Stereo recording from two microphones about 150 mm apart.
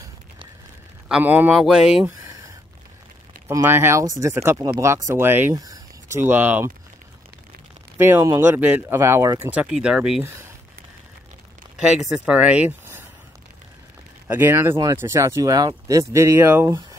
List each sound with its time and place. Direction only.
1.0 s speech: 10° right (ahead or behind)
3.4 s speech: 15° right (ahead or behind)
5.6 s a sound: 20° right (ahead or behind)
8.0 s speech: 20° right (ahead or behind)
12.1 s speech: 5° right (ahead or behind)
14.2 s speech: 15° right (ahead or behind)